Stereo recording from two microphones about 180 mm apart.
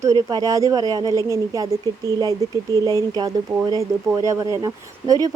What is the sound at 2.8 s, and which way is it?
A woman's voice, 20° right (ahead or behind).